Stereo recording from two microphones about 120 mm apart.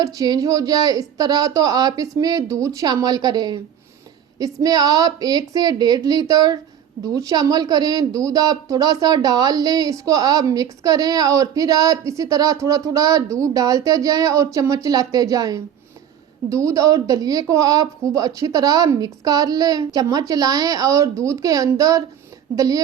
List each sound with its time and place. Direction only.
0.0 s speech: 30° right (ahead or behind)
4.6 s speech: 35° right (ahead or behind)